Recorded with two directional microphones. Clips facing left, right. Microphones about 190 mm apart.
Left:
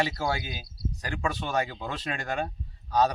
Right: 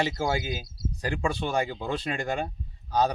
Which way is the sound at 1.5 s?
10° right (ahead or behind).